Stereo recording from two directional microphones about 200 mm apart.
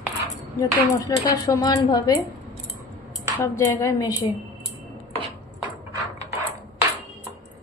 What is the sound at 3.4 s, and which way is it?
Speech, 10° left (ahead or behind).